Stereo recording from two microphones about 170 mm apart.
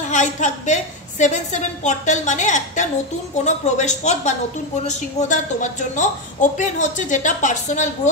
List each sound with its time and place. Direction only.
0.1 s a woman's voice: 45° left (ahead or behind)